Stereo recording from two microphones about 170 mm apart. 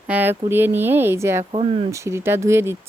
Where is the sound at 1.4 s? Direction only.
35° right (ahead or behind).